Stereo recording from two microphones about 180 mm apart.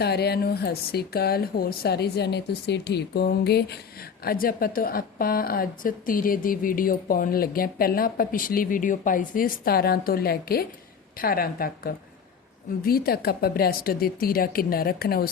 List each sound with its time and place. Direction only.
0.0 s a woman's voice: 65° left (ahead or behind)